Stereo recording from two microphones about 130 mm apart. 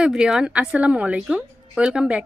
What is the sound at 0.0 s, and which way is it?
A woman's voice, 5° right (ahead or behind).